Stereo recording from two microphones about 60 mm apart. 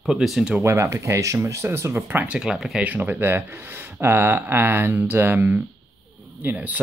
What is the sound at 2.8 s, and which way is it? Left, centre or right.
Speech, right.